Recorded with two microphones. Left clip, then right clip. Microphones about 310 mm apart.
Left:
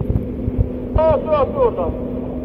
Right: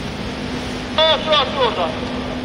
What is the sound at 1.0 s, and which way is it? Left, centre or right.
Vehicle, centre.